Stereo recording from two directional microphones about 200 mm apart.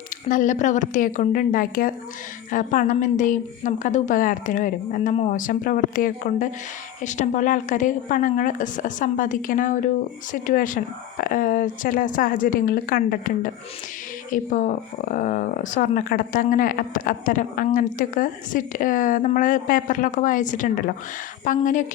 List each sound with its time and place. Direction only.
0.3 s speech: 40° left (ahead or behind)